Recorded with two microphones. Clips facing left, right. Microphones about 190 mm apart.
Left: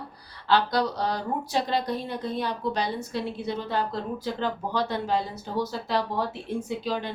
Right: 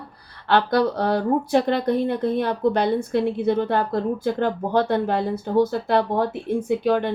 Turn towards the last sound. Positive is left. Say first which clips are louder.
# right 9 dB
turn(degrees=-60)  # may be behind; listen again after turning